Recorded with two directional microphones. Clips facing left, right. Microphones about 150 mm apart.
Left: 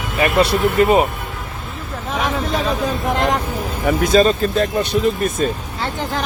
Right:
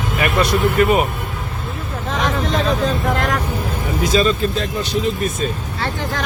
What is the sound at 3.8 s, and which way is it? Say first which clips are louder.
Speech: left 4 dB; 55° left (ahead or behind).